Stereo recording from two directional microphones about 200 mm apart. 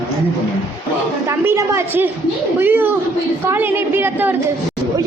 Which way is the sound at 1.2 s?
15° right (ahead or behind).